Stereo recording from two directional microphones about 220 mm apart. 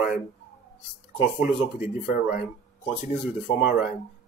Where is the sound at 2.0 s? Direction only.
40° left (ahead or behind).